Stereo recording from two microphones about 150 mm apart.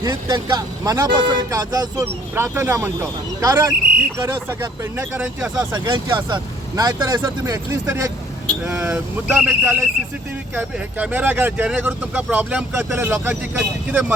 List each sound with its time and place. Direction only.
0.0 s speech: 25° right (ahead or behind); by 5.6 s 10° right (ahead or behind)
5.7 s speech: 25° right (ahead or behind)
8.6 s speech: 10° right (ahead or behind)